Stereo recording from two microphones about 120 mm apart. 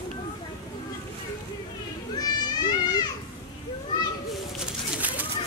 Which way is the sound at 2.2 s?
35° left (ahead or behind).